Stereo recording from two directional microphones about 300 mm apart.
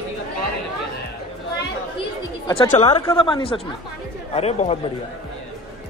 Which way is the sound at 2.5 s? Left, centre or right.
Centre.